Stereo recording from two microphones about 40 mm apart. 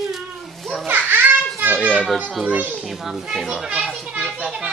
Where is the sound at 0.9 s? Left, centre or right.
Right.